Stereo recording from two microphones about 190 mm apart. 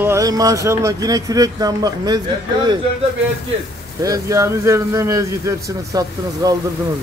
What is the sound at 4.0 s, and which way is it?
A man's voice, 15° right (ahead or behind).